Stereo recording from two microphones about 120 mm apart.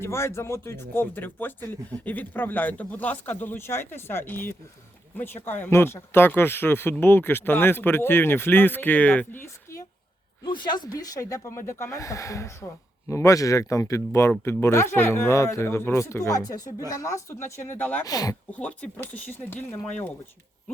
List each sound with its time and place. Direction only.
0.0 s speech: 20° left (ahead or behind)
10.4 s speech: 40° left (ahead or behind); by 18.0 s 15° left (ahead or behind)
18.0 s speech: 30° left (ahead or behind)
18.5 s speech: 10° left (ahead or behind)